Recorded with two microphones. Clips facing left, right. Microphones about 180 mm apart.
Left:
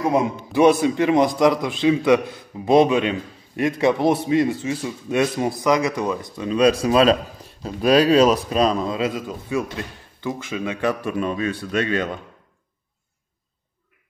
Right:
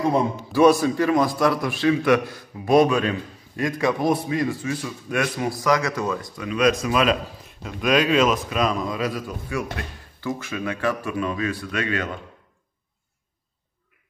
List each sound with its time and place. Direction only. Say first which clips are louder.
0.1 s a man's voice: left 1 dB; 20° left (ahead or behind)